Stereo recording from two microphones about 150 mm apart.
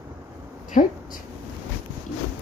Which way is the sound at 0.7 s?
60° left (ahead or behind).